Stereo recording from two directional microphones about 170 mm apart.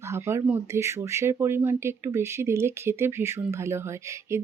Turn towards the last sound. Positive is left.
turn(degrees=-15)  # may be behind; listen again after turning